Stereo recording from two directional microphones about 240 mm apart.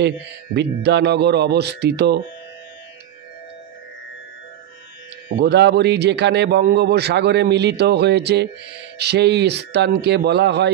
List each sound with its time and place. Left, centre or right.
0.6 s a man's voice: right
5.4 s a man's voice: right